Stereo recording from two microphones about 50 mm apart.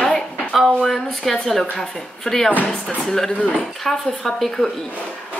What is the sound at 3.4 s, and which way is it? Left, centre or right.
Speech, left.